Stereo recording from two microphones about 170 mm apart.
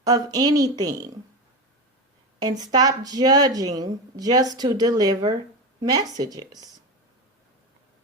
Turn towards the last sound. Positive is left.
turn(degrees=-20)  # may be behind; listen again after turning